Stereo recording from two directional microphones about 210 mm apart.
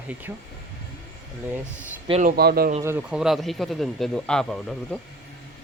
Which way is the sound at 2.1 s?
40° right (ahead or behind).